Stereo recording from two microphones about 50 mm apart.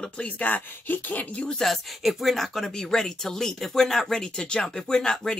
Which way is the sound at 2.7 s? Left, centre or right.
Centre.